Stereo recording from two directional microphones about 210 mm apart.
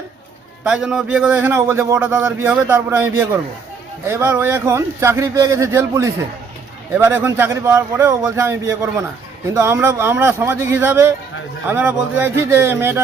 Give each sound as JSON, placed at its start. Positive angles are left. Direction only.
{"t": 0.6, "sound": "a man's voice", "side_deg": -5}